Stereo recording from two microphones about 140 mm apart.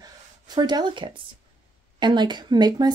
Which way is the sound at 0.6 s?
30° right (ahead or behind).